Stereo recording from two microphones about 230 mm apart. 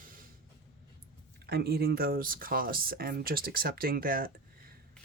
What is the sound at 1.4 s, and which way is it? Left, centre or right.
Speech, right.